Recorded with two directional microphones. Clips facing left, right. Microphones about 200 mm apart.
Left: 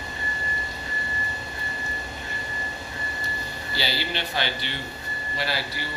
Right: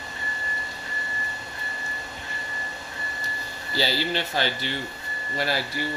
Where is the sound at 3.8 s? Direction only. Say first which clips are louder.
Right 4 dB; 40° right (ahead or behind).